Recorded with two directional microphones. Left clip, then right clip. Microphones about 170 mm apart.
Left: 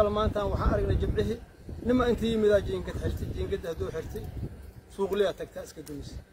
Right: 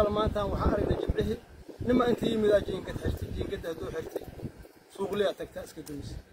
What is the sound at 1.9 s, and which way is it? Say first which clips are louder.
Speech: even; 15° left (ahead or behind).